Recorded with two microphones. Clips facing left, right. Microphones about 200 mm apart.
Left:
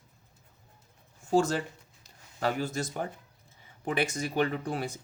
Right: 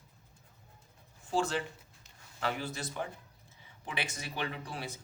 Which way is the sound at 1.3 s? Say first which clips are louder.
Left 6 dB; 40° left (ahead or behind).